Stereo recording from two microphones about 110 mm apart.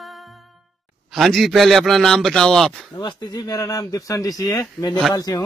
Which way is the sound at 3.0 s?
35° left (ahead or behind).